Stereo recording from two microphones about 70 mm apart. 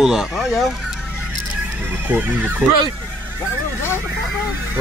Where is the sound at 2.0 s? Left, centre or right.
Right.